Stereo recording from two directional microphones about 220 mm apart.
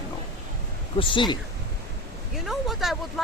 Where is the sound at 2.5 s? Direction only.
Centre (ahead or behind).